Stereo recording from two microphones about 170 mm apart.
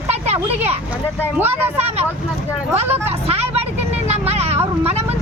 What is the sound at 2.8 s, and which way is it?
Speech, 10° right (ahead or behind).